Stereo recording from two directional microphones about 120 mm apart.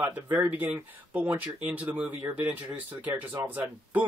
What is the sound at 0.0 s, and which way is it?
Speech, 15° right (ahead or behind).